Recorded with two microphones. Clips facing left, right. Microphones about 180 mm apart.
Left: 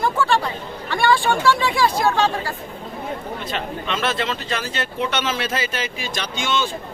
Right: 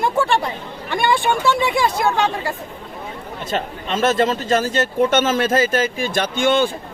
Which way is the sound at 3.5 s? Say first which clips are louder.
Right 5 dB; 45° right (ahead or behind).